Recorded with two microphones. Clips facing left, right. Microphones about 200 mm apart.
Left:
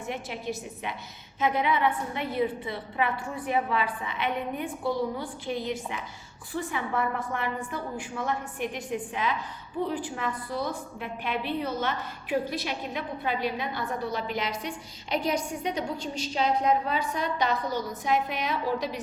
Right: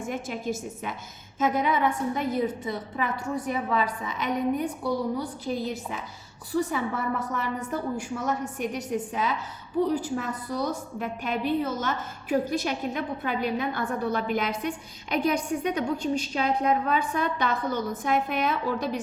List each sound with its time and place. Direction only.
0.0 s a woman's voice: 45° right (ahead or behind)